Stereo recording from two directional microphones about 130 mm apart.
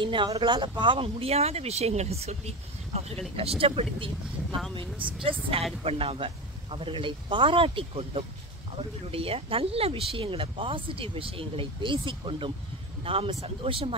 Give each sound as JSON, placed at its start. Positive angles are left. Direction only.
{"t": 0.0, "sound": "speech", "side_deg": -40}
{"t": 5.9, "sound": "speech", "side_deg": -45}